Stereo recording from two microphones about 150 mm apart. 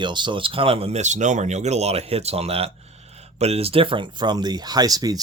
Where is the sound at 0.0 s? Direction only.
30° right (ahead or behind).